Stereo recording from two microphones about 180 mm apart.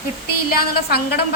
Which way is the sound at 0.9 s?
60° left (ahead or behind).